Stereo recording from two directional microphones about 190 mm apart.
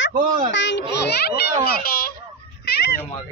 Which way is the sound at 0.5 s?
70° left (ahead or behind).